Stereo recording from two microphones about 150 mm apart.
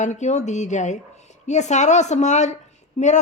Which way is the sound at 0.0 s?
50° left (ahead or behind).